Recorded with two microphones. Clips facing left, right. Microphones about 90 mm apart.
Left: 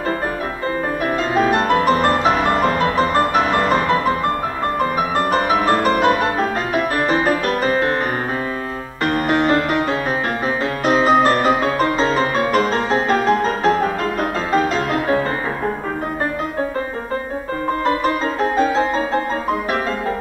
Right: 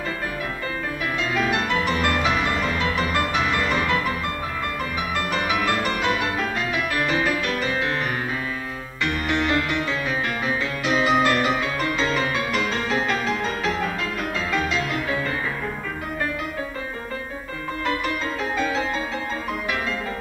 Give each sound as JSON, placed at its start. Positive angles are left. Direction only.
{"t": 1.3, "sound": "music", "side_deg": 40}
{"t": 5.1, "sound": "music", "side_deg": 40}
{"t": 9.0, "sound": "music", "side_deg": 40}
{"t": 10.9, "sound": "music", "side_deg": 40}
{"t": 17.8, "sound": "music", "side_deg": 40}